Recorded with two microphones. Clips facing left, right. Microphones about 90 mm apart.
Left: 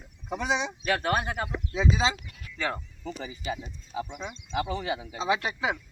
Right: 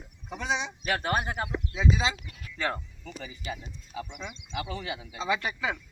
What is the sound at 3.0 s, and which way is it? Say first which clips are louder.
A man's voice: left 5 dB; 25° left (ahead or behind).